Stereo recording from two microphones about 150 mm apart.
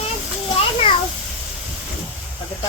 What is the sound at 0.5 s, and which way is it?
Children playing, 40° left (ahead or behind).